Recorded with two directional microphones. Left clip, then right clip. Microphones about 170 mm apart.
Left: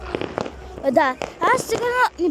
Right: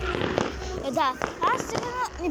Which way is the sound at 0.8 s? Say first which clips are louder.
Left 8 dB; 35° left (ahead or behind).